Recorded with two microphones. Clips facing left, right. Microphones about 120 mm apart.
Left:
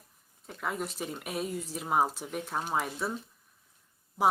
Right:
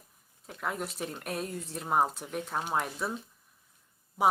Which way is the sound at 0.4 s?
Centre (ahead or behind).